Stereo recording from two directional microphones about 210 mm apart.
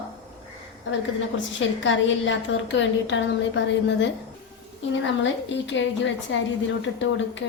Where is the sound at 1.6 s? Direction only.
65° left (ahead or behind).